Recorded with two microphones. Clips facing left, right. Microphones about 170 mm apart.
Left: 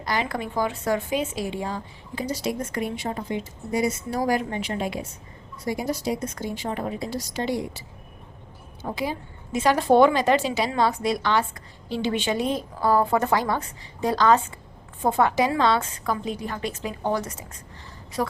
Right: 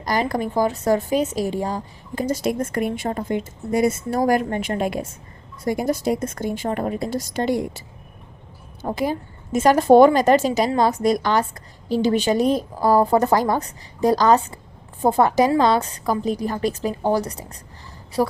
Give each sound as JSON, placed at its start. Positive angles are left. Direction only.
{"t": 0.0, "sound": "a woman's voice", "side_deg": -40}